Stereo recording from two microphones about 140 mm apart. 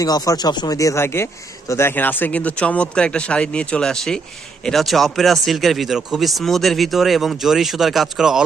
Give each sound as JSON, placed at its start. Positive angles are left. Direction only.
{"t": 0.0, "sound": "speech", "side_deg": 25}